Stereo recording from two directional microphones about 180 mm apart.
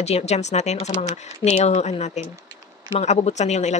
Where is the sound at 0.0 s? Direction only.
35° left (ahead or behind).